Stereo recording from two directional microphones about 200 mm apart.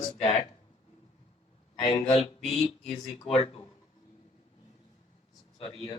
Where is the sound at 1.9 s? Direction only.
30° left (ahead or behind).